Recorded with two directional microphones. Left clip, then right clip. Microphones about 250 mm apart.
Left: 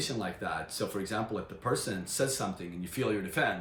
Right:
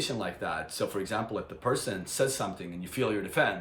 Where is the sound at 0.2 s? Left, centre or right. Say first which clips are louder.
Right 2 dB; centre.